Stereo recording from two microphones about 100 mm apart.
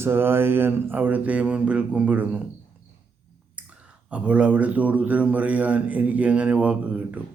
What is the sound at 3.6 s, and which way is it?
Clicking, 15° right (ahead or behind).